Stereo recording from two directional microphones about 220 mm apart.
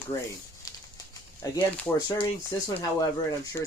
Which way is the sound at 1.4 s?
15° left (ahead or behind).